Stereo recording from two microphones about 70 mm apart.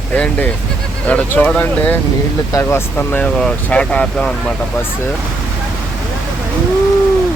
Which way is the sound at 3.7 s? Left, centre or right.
Centre.